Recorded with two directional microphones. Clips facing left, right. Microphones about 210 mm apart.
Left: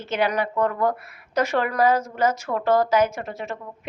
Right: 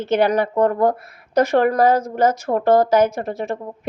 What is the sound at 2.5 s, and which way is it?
Speech, 35° right (ahead or behind).